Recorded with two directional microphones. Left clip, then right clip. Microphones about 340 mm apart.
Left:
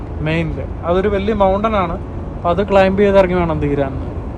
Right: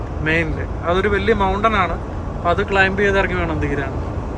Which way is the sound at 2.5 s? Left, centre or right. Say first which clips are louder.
Left 3 dB; centre.